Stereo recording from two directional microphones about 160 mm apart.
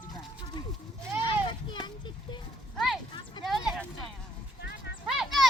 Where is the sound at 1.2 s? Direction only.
30° left (ahead or behind).